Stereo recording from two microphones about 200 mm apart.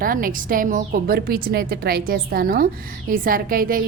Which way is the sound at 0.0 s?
45° right (ahead or behind).